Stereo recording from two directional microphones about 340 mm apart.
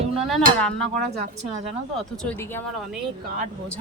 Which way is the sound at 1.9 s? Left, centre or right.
Centre.